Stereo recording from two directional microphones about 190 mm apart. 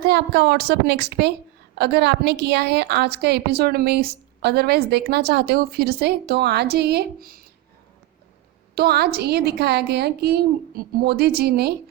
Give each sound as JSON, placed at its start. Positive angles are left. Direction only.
{"t": 0.0, "sound": "a woman's voice", "side_deg": -60}
{"t": 8.7, "sound": "a woman's voice", "side_deg": -55}